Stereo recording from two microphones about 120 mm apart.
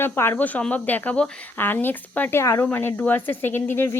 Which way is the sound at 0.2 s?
15° left (ahead or behind).